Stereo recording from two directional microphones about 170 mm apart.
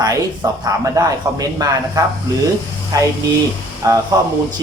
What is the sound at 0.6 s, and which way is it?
Speech, 20° right (ahead or behind).